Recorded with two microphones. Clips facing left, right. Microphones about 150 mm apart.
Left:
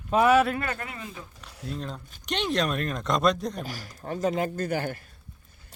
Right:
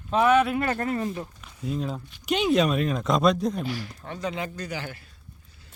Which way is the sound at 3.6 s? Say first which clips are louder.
Right 2 dB; 40° left (ahead or behind).